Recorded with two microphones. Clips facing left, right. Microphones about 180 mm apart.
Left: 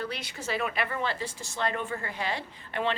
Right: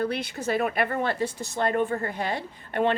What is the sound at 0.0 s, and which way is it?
A woman's voice, 55° right (ahead or behind).